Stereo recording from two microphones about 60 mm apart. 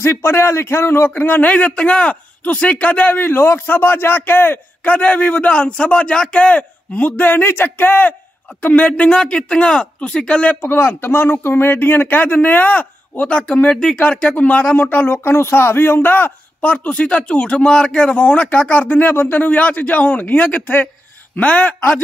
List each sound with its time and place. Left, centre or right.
0.0 s speech: left
1.1 s a man's voice: left
4.8 s a man's voice: left
10.6 s a man's voice: left